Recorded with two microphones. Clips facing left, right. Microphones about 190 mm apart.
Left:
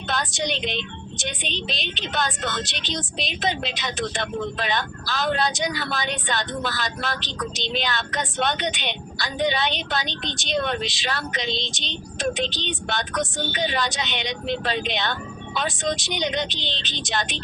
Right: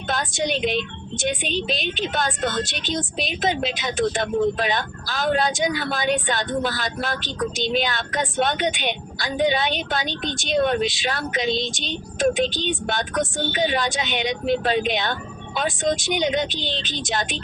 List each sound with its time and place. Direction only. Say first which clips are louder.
0.1 s a woman's voice: right 3 dB; 45° right (ahead or behind)